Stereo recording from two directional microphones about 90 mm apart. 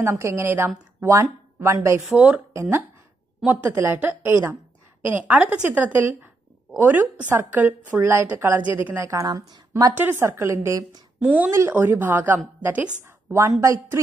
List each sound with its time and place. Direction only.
0.0 s a woman's voice: 30° right (ahead or behind)
2.1 s speech: 15° right (ahead or behind)
2.5 s a woman's voice: 30° right (ahead or behind)
9.1 s speech: 40° right (ahead or behind)
9.9 s a woman's voice: 25° right (ahead or behind)
11.1 s speech: 15° right (ahead or behind)
11.7 s a woman's voice: 25° right (ahead or behind)
13.3 s speech: 35° right (ahead or behind)